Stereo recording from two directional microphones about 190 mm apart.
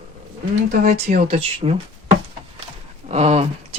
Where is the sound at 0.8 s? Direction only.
45° right (ahead or behind).